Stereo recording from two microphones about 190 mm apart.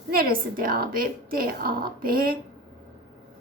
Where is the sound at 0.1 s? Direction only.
50° right (ahead or behind).